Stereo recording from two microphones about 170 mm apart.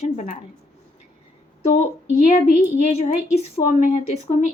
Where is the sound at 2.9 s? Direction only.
35° left (ahead or behind).